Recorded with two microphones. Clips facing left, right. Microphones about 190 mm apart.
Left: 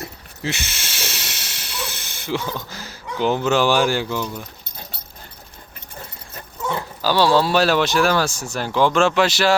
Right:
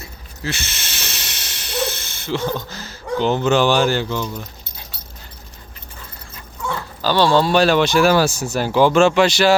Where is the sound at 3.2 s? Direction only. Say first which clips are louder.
Right 1 dB; 10° left (ahead or behind).